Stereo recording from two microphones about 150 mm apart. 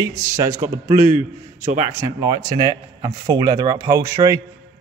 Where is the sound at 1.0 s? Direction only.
60° right (ahead or behind).